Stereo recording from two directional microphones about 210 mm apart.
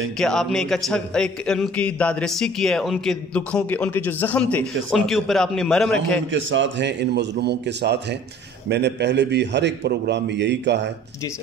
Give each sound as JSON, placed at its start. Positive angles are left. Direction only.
{"t": 0.2, "sound": "a man's voice", "side_deg": 0}
{"t": 6.3, "sound": "a man's voice", "side_deg": -60}